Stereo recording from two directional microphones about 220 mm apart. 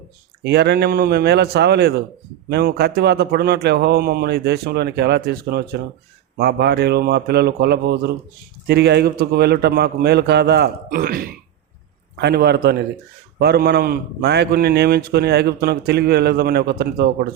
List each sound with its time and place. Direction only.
0.4 s a man's voice: 50° right (ahead or behind)